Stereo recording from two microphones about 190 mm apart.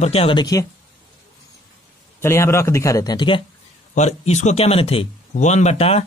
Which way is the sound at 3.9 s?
35° left (ahead or behind).